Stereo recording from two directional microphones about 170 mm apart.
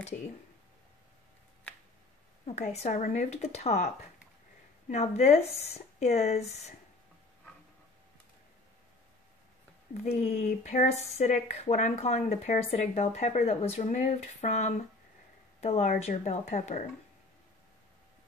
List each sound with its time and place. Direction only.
2.4 s speech: 40° left (ahead or behind)
10.1 s speech: 45° left (ahead or behind)